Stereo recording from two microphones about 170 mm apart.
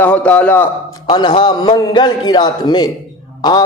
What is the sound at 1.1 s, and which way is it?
A man's voice, 25° left (ahead or behind).